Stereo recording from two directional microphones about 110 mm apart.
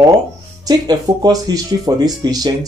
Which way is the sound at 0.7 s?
35° right (ahead or behind).